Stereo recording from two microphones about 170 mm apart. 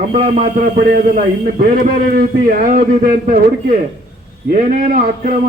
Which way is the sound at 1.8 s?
50° right (ahead or behind).